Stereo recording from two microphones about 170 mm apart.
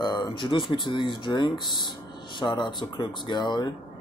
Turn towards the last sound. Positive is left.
turn(degrees=25)  # may be behind; listen again after turning